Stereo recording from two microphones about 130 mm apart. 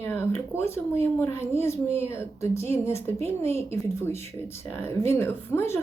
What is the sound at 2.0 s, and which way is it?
A woman's voice, 20° left (ahead or behind).